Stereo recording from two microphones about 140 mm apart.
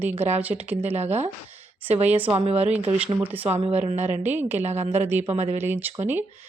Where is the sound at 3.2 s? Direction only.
10° right (ahead or behind).